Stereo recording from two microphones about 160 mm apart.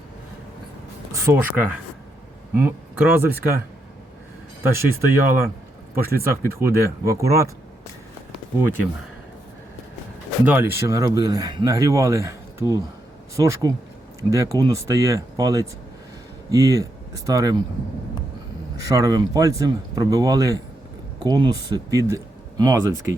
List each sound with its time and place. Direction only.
1.1 s speech: 15° right (ahead or behind)
4.6 s speech: 15° right (ahead or behind)
8.6 s speech: 15° right (ahead or behind)
10.4 s speech: 15° right (ahead or behind)
18.9 s speech: 20° right (ahead or behind)